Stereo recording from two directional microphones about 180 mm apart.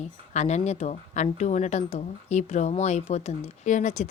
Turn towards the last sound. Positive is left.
turn(degrees=45)  # may be behind; listen again after turning